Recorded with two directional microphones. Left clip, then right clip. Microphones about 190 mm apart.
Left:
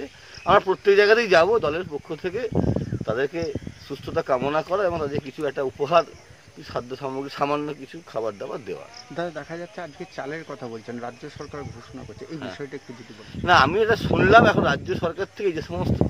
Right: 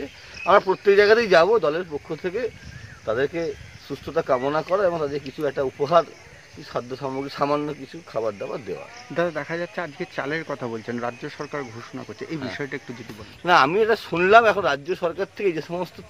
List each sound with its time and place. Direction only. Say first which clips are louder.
0.5 s speech: right 1 dB; centre (ahead or behind)
9.1 s speech: right 6 dB; 35° right (ahead or behind)
13.5 s speech: even; centre (ahead or behind)